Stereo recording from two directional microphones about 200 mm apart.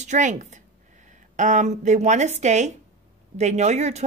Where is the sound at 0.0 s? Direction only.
35° right (ahead or behind).